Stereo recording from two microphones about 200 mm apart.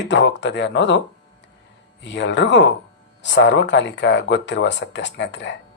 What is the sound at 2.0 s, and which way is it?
Speech, 65° left (ahead or behind).